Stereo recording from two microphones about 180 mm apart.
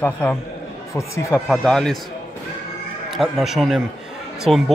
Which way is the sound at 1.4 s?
Centre (ahead or behind).